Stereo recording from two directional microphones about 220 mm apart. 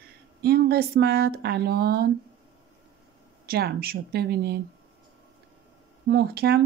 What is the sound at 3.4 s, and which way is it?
Speech, 45° right (ahead or behind).